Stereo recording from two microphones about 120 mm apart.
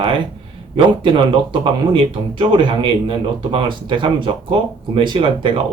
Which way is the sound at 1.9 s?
45° right (ahead or behind).